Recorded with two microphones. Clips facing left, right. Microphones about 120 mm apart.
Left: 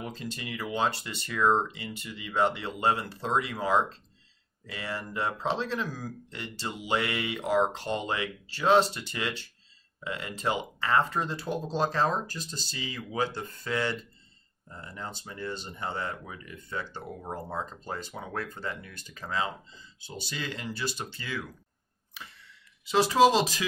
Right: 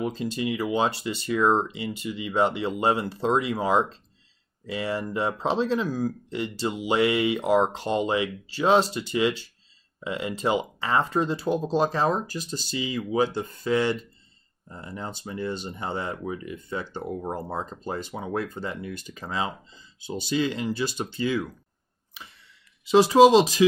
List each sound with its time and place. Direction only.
0.1 s speech: 20° right (ahead or behind)
22.8 s speech: 20° right (ahead or behind)